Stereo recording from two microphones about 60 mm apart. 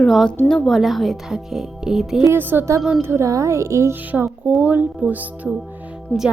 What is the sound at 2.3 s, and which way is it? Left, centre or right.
Speech, right.